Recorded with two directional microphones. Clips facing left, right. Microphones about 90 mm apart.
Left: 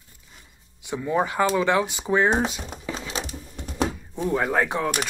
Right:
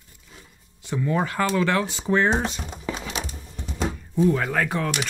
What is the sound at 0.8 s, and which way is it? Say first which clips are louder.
Speech: left 1 dB; 15° left (ahead or behind).